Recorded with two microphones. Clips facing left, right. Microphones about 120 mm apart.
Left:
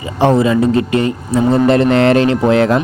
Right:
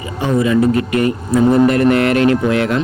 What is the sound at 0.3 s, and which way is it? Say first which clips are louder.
Speech: left 1 dB; 25° left (ahead or behind).